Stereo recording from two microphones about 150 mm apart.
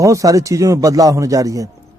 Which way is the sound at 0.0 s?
20° right (ahead or behind).